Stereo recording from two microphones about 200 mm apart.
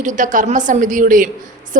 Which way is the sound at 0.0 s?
40° right (ahead or behind).